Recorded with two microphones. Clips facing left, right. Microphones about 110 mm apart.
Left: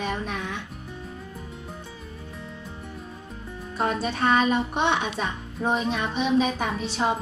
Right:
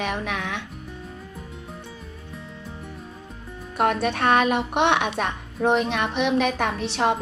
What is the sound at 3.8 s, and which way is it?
Speech, 65° right (ahead or behind).